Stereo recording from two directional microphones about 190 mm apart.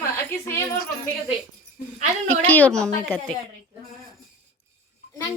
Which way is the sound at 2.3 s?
10° left (ahead or behind).